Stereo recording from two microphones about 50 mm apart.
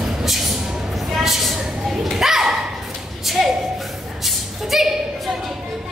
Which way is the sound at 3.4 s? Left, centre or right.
Centre.